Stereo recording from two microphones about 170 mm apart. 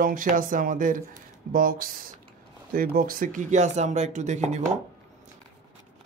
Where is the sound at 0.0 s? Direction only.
55° right (ahead or behind).